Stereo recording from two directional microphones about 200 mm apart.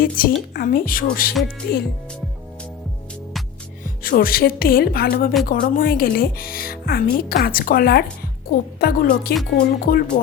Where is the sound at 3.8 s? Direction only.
45° left (ahead or behind).